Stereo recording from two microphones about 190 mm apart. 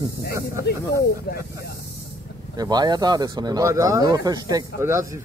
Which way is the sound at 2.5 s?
20° right (ahead or behind).